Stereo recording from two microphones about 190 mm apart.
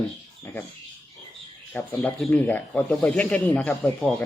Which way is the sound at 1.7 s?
5° left (ahead or behind).